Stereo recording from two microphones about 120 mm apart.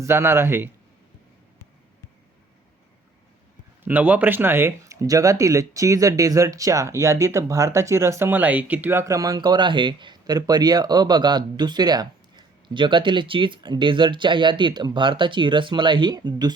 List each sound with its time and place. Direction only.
0.0 s a man's voice: 20° right (ahead or behind)
3.8 s speech: 10° right (ahead or behind); by 16.6 s 35° right (ahead or behind)